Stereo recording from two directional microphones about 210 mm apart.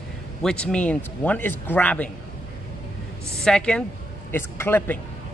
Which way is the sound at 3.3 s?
5° left (ahead or behind).